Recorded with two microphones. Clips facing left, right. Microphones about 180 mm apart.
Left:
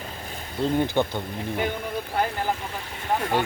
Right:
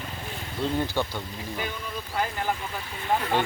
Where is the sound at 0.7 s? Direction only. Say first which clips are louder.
Left 6 dB; 20° left (ahead or behind).